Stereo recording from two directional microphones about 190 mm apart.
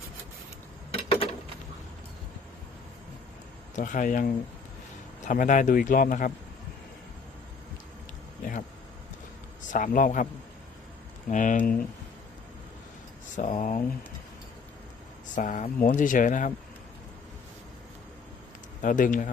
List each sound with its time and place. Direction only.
1.0 s a sound: 30° left (ahead or behind)
3.8 s a man's voice: 40° left (ahead or behind)
9.6 s a man's voice: 45° left (ahead or behind)
11.3 s speech: 40° left (ahead or behind)
13.3 s a man's voice: 40° left (ahead or behind)
15.4 s a man's voice: 40° left (ahead or behind)
18.8 s a man's voice: 45° left (ahead or behind)